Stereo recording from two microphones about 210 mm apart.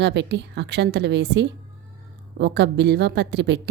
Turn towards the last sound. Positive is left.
turn(degrees=-55)  # may be behind; listen again after turning